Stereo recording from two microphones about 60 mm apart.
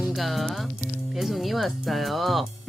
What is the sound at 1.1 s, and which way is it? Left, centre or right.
Speech, centre.